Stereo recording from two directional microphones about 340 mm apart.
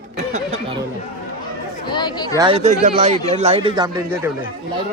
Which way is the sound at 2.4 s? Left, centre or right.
Centre.